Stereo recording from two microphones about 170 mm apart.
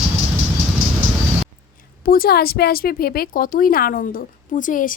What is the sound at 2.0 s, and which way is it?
A woman's voice, 60° left (ahead or behind).